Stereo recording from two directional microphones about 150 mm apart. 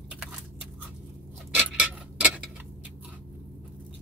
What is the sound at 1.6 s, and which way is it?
Clock, 5° right (ahead or behind).